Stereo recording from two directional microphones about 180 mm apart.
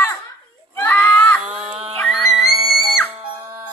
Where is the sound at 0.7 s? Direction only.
10° left (ahead or behind).